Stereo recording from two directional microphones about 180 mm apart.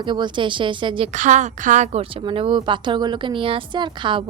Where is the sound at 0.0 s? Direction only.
25° right (ahead or behind).